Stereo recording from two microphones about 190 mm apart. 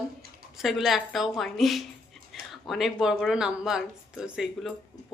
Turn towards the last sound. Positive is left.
turn(degrees=0)  # may be behind; listen again after turning